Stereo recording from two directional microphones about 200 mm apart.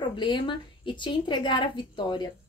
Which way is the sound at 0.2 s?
25° left (ahead or behind).